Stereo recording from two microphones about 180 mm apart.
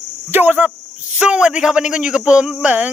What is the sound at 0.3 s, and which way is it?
A man's voice, 10° right (ahead or behind).